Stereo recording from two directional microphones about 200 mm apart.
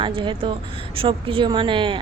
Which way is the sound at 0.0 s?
25° right (ahead or behind).